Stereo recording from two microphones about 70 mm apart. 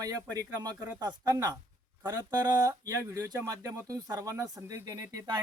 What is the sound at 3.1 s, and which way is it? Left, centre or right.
Speech, right.